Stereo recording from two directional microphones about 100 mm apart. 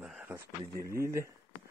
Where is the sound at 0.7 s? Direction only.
30° right (ahead or behind).